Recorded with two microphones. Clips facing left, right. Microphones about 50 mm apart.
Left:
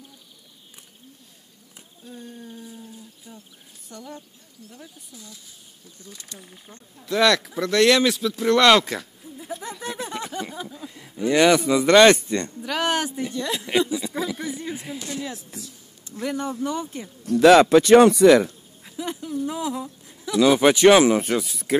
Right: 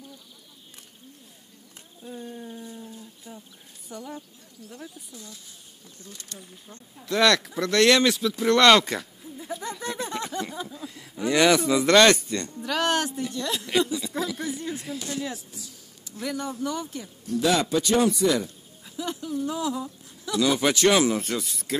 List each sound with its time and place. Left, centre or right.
2.0 s a sound: centre
3.9 s speech: centre
6.1 s speech: left
7.0 s a sound: centre
12.1 s speech: left
12.6 s speech: centre
16.1 s speech: left
17.3 s speech: left
18.9 s a sound: centre
20.3 s speech: left
20.9 s speech: left
21.4 s speech: centre